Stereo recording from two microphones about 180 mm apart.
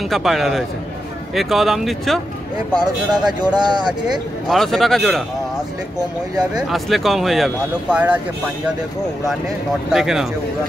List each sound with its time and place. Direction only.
0.1 s speech: centre (ahead or behind)
2.7 s speech: 25° right (ahead or behind)
3.8 s speech: centre (ahead or behind)
6.7 s speech: centre (ahead or behind)
9.9 s speech: centre (ahead or behind)